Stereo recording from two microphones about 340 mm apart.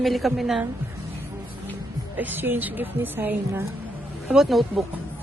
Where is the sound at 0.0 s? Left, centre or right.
Centre.